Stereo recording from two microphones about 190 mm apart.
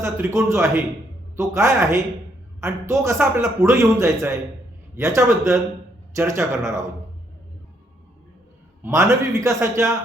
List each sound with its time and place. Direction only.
0.0 s a man's voice: 15° right (ahead or behind)
8.8 s a man's voice: 15° right (ahead or behind)